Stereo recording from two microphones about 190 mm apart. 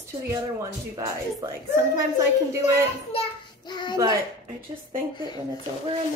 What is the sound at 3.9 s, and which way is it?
Speech, 15° right (ahead or behind).